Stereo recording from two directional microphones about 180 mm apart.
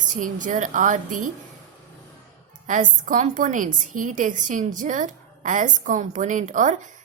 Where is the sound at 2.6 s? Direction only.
45° right (ahead or behind).